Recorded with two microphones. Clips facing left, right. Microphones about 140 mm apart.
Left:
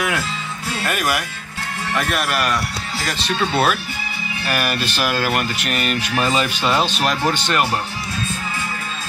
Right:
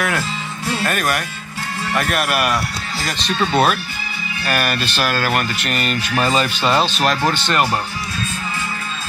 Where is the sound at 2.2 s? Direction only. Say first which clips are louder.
Right 2 dB; 5° right (ahead or behind).